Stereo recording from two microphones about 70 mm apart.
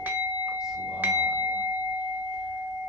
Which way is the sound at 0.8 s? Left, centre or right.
Right.